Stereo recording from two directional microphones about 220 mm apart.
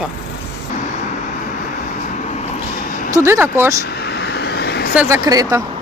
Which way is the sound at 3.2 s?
10° right (ahead or behind).